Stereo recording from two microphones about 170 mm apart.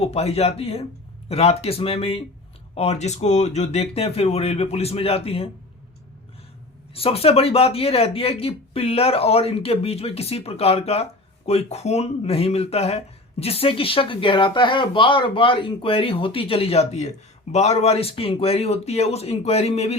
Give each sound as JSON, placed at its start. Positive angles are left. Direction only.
{"t": 0.0, "sound": "speech", "side_deg": 35}
{"t": 6.9, "sound": "speech", "side_deg": 35}